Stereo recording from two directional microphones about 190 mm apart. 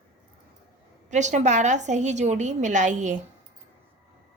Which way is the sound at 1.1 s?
40° right (ahead or behind).